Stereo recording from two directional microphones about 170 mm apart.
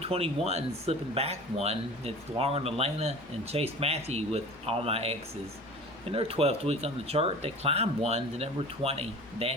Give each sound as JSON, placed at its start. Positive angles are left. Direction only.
{"t": 0.0, "sound": "a man's voice", "side_deg": -35}